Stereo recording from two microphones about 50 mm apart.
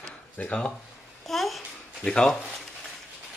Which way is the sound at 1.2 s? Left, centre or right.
Centre.